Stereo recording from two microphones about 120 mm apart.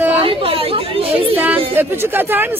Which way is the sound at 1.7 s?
20° right (ahead or behind).